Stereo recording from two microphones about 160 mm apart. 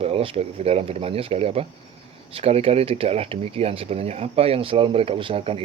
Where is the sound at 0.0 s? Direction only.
35° right (ahead or behind).